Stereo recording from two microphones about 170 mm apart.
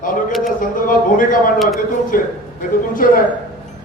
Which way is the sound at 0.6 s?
55° left (ahead or behind).